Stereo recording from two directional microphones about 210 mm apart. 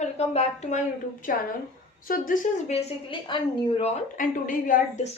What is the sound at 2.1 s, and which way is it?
A woman's voice, 35° left (ahead or behind).